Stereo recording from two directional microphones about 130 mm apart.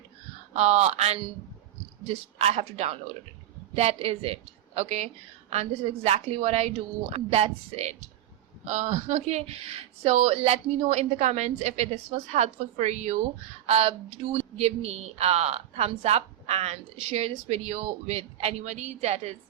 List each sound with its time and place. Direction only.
0.5 s a woman's voice: 55° right (ahead or behind)